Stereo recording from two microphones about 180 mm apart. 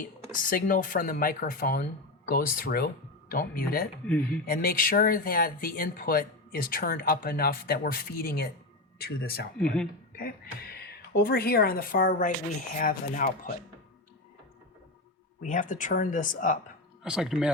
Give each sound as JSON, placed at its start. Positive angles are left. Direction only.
{"t": 0.3, "sound": "speech", "side_deg": 50}
{"t": 9.6, "sound": "speech", "side_deg": 5}
{"t": 10.2, "sound": "speech", "side_deg": 55}
{"t": 15.4, "sound": "speech", "side_deg": 45}
{"t": 17.0, "sound": "speech", "side_deg": -5}